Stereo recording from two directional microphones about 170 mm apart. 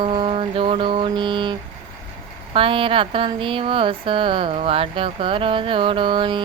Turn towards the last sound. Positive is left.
turn(degrees=-30)  # may be behind; listen again after turning